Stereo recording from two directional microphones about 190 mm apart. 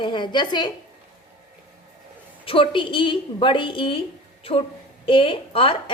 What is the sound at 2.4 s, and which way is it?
A woman's voice, 30° left (ahead or behind).